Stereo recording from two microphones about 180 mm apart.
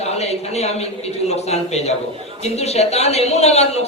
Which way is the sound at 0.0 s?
35° left (ahead or behind).